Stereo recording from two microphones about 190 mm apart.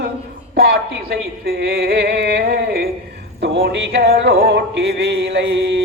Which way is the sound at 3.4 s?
60° right (ahead or behind).